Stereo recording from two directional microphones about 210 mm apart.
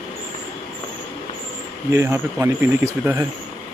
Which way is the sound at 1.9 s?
10° right (ahead or behind).